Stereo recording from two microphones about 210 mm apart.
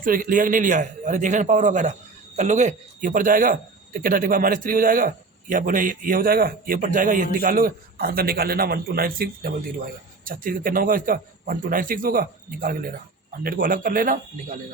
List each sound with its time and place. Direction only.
0.0 s a man's voice: 40° right (ahead or behind)